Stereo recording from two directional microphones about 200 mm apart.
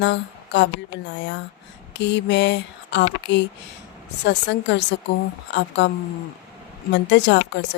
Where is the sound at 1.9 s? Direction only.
60° left (ahead or behind).